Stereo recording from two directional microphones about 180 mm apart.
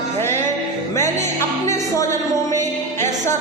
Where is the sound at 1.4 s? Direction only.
15° left (ahead or behind).